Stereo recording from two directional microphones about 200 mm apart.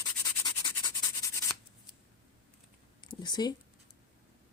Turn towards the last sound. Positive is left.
turn(degrees=20)  # may be behind; listen again after turning